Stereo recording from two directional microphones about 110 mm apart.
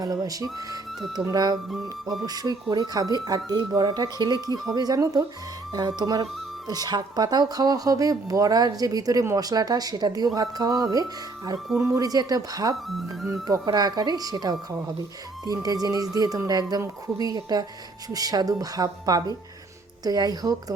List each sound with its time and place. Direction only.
0.0 s speech: 35° right (ahead or behind)